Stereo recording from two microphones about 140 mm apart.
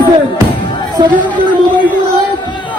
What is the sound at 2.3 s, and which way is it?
Music, 35° left (ahead or behind).